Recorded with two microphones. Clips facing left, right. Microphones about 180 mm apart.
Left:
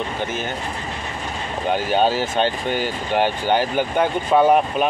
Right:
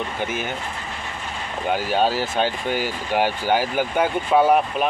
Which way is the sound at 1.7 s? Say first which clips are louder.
Left 2 dB; 5° right (ahead or behind).